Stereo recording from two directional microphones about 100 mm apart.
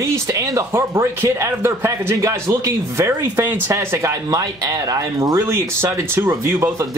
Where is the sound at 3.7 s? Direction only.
30° right (ahead or behind).